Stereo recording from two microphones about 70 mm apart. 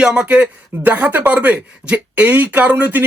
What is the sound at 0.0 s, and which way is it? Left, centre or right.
Speech, centre.